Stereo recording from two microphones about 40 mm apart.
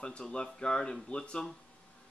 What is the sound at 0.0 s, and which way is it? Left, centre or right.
Speech, left.